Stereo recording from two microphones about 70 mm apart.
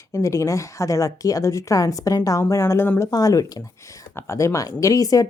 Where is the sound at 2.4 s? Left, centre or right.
Left.